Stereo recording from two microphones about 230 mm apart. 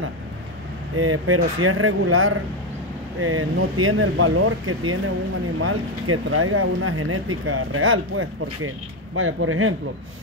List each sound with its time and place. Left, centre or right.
0.9 s speech: right